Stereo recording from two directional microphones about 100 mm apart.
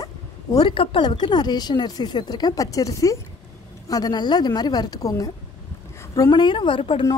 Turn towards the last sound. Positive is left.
turn(degrees=60)  # may be behind; listen again after turning